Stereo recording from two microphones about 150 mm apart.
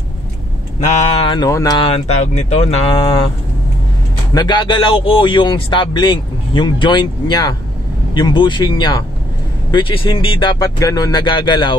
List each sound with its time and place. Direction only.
1.2 s speech: 30° left (ahead or behind)
1.9 s speech: 45° left (ahead or behind)
4.3 s speech: 30° left (ahead or behind)
10.6 s speech: 25° left (ahead or behind)